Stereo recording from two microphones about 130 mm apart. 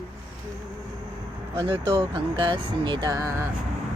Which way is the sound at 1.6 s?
45° right (ahead or behind).